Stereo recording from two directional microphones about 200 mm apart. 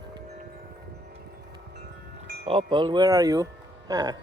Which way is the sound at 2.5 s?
25° right (ahead or behind).